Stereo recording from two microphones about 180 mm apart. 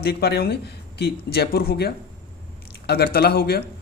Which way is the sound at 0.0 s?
60° left (ahead or behind).